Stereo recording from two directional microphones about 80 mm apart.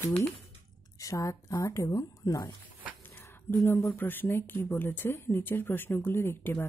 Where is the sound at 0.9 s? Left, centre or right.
Left.